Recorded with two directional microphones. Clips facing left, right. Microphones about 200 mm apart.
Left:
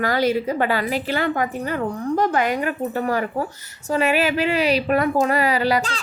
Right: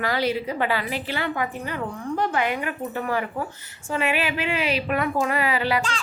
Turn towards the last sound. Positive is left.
turn(degrees=40)  # may be behind; listen again after turning